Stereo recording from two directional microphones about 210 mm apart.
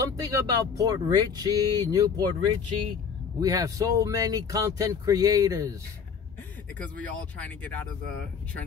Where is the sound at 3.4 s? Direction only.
15° right (ahead or behind).